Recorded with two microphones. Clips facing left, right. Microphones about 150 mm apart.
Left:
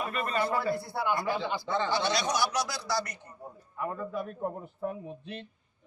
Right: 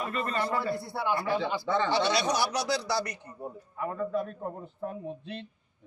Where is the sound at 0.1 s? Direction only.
5° left (ahead or behind).